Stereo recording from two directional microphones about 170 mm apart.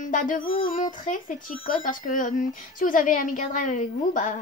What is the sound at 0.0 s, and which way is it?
Speech, 50° left (ahead or behind).